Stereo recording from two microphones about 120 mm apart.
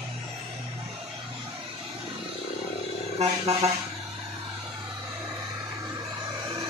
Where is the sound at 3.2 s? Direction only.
55° right (ahead or behind).